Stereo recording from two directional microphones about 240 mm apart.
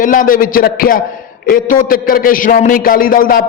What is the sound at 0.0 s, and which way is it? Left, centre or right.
A man's voice, left.